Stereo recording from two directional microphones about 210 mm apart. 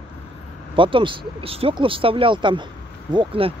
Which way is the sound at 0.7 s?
25° right (ahead or behind).